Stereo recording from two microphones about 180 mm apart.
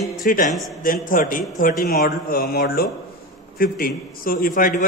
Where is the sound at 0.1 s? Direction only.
50° left (ahead or behind).